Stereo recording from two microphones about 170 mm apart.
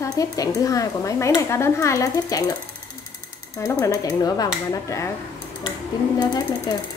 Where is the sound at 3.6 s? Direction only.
15° left (ahead or behind).